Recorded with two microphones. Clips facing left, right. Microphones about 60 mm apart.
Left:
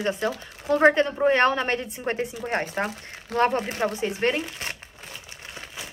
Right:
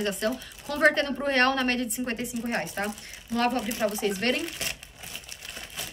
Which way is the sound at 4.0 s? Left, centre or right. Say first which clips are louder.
Left 2 dB; centre.